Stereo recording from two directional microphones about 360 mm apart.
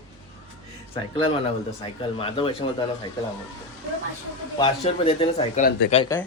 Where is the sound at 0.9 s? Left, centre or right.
Centre.